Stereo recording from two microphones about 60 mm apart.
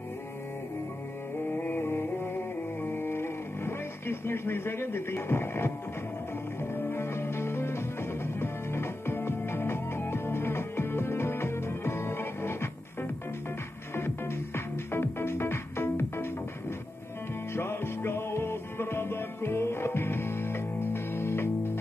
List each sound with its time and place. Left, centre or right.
1.5 s music: left
6.7 s music: left
13.9 s music: left
17.6 s music: left